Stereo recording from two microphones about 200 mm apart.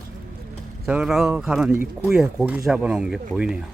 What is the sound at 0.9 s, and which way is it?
Speech, 5° right (ahead or behind).